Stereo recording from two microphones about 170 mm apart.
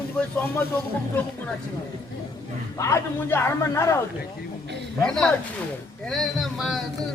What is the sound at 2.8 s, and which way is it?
A man's voice, 15° left (ahead or behind).